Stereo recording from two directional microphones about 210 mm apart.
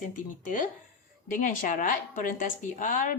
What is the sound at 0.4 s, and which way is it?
Speech, 40° left (ahead or behind).